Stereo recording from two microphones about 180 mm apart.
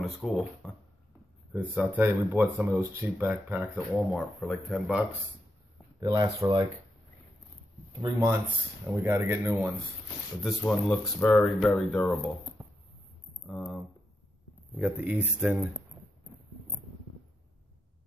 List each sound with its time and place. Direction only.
0.0 s speech: centre (ahead or behind)
1.5 s speech: 10° right (ahead or behind)
5.9 s speech: 20° right (ahead or behind)
8.0 s speech: 15° right (ahead or behind)
10.4 s speech: centre (ahead or behind)
13.5 s speech: 5° left (ahead or behind)